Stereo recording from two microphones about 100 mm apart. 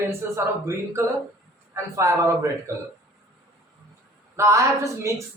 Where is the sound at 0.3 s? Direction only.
30° right (ahead or behind).